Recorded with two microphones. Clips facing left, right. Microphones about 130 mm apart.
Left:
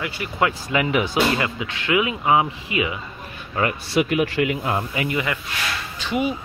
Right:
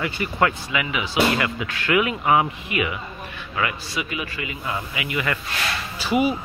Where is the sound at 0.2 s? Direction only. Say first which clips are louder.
Right 3 dB; centre (ahead or behind).